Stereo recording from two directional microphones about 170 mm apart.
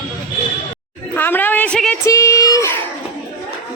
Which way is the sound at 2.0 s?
15° left (ahead or behind).